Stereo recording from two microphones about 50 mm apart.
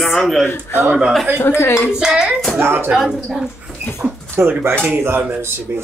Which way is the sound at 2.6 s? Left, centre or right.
Right.